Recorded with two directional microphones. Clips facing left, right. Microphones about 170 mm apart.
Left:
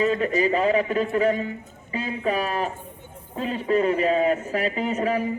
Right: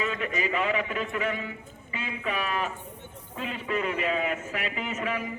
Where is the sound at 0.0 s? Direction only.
35° left (ahead or behind).